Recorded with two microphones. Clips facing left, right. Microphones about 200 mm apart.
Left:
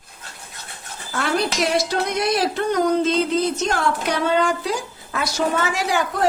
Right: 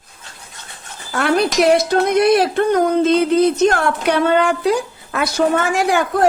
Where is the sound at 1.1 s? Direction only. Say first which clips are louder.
Right 6 dB; 60° right (ahead or behind).